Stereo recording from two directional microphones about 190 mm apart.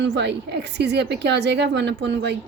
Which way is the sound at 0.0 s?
65° right (ahead or behind).